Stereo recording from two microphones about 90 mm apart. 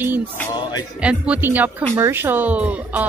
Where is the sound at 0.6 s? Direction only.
55° left (ahead or behind).